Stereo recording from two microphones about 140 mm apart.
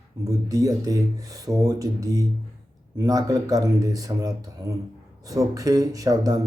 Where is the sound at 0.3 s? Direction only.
25° right (ahead or behind).